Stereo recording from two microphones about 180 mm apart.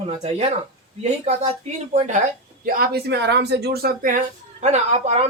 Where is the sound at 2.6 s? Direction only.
55° right (ahead or behind).